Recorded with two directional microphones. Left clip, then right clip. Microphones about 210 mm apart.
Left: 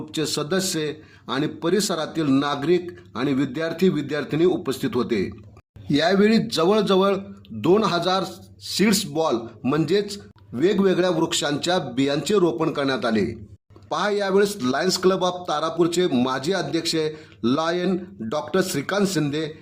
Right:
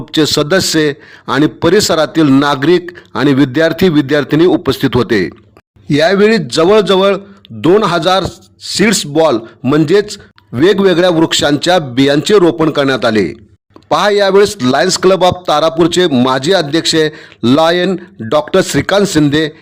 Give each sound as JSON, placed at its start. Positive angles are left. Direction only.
{"t": 0.1, "sound": "a man's voice", "side_deg": -45}